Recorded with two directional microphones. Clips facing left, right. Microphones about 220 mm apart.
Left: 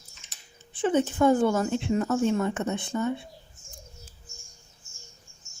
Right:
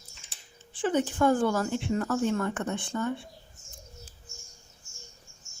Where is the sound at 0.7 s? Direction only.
20° left (ahead or behind).